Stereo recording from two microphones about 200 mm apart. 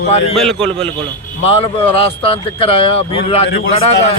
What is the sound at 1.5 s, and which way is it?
Speech, 30° left (ahead or behind).